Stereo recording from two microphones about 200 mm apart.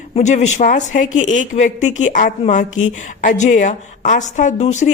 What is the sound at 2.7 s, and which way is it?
Speech, 80° left.